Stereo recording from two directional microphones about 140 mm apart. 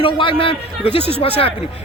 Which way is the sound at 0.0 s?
40° left (ahead or behind).